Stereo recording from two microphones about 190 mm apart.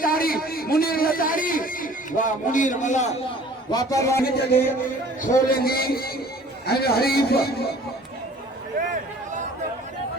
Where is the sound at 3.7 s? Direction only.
20° left (ahead or behind).